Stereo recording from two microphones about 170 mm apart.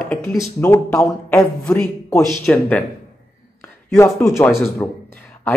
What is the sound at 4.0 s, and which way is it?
Speech, 15° left (ahead or behind).